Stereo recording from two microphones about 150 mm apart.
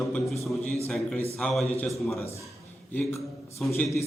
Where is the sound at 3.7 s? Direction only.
15° left (ahead or behind).